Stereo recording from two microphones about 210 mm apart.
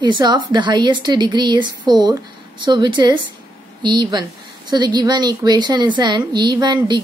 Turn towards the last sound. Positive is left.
turn(degrees=-20)  # may be behind; listen again after turning